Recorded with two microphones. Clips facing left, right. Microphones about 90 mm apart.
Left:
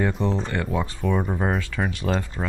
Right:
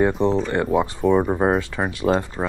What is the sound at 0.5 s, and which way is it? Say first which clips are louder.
Speech: right 6 dB; 25° right (ahead or behind).